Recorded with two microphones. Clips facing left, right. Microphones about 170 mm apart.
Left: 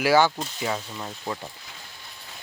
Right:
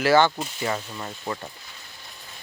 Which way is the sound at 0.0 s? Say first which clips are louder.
Right 1 dB; 10° left (ahead or behind).